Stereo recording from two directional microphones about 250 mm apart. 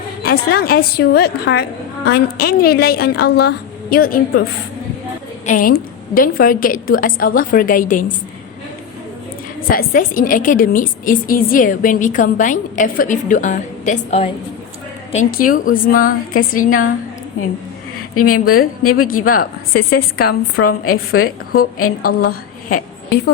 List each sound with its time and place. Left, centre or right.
0.2 s a woman's voice: left
5.5 s a woman's voice: left
9.6 s a woman's voice: left
18.1 s a woman's voice: left
19.9 s a woman's voice: left
20.8 s a woman's voice: left
22.0 s a woman's voice: left